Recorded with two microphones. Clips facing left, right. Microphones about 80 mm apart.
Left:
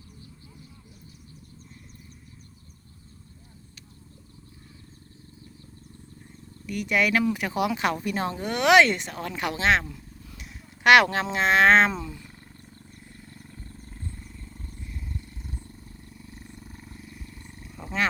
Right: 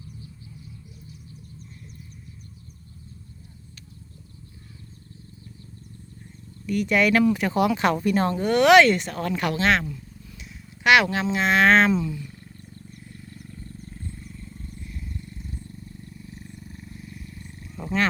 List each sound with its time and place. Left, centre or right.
6.7 s speech: centre
9.5 s speech: left
9.9 s speech: left
12.9 s wild animals: left
17.7 s roar: centre